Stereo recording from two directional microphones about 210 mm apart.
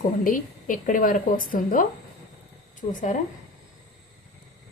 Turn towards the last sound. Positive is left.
turn(degrees=35)  # may be behind; listen again after turning